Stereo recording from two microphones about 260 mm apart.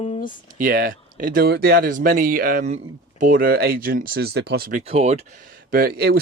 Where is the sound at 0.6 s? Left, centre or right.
Right.